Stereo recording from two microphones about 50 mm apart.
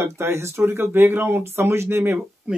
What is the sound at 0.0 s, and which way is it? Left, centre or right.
Speech, right.